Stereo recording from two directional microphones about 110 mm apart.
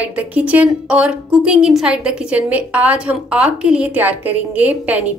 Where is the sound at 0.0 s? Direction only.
15° right (ahead or behind).